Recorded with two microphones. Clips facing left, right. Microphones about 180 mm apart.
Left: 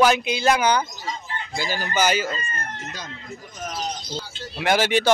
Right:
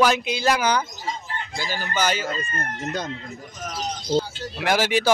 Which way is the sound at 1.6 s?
10° left (ahead or behind).